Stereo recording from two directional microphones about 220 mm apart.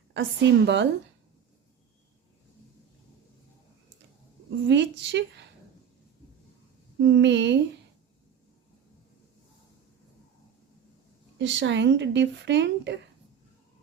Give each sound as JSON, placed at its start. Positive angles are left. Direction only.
{"t": 0.1, "sound": "speech", "side_deg": -55}
{"t": 4.7, "sound": "speech", "side_deg": -50}
{"t": 7.0, "sound": "speech", "side_deg": -55}
{"t": 11.3, "sound": "speech", "side_deg": -55}